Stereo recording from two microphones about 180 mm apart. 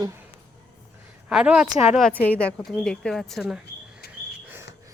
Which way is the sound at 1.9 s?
5° left (ahead or behind).